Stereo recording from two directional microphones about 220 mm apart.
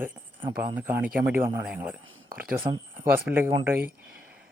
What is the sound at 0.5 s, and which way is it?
Speech, 10° right (ahead or behind).